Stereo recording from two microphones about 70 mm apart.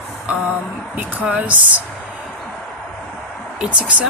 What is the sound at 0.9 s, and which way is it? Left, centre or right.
Speech, right.